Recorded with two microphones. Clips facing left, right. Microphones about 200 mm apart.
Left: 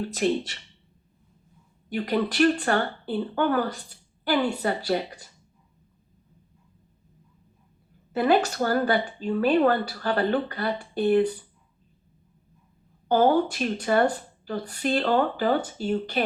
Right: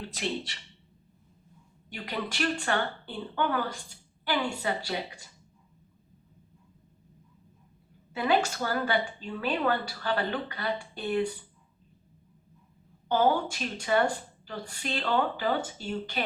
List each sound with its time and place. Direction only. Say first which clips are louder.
0.0 s speech: left 9 dB; 45° left (ahead or behind)
1.9 s speech: left 10 dB; 40° left (ahead or behind)
8.1 s speech: left 5 dB; 40° left (ahead or behind)
13.1 s speech: left 5 dB; 40° left (ahead or behind)